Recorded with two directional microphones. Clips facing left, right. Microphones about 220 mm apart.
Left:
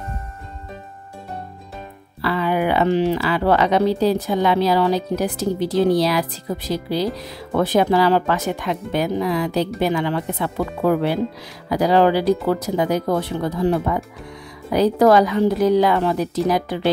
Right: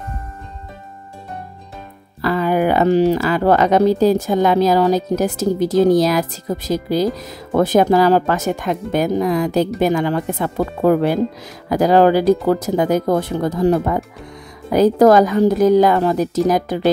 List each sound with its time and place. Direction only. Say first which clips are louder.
2.2 s speech: right 4 dB; 45° right (ahead or behind)